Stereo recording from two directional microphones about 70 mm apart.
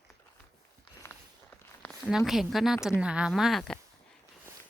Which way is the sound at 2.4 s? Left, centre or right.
Centre.